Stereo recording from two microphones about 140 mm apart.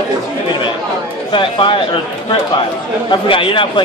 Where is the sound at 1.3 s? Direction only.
35° left (ahead or behind).